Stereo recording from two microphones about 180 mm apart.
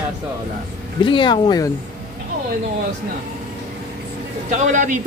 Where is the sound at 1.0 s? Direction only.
25° left (ahead or behind).